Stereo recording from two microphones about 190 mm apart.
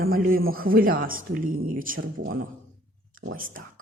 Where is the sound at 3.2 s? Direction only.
45° right (ahead or behind).